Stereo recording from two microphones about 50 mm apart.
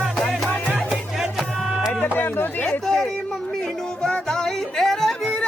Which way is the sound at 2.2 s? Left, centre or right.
Left.